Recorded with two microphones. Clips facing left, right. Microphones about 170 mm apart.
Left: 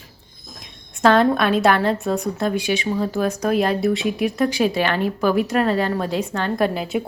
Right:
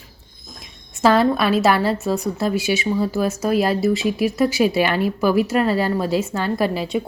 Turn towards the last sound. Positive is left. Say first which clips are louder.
# even
turn(degrees=0)  # may be behind; listen again after turning